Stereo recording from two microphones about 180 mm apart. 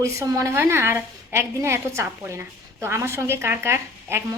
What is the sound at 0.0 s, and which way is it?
A woman's voice, 15° right (ahead or behind).